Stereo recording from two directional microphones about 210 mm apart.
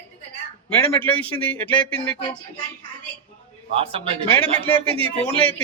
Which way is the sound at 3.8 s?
25° right (ahead or behind).